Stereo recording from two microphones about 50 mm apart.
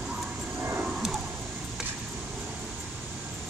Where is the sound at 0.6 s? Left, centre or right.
Right.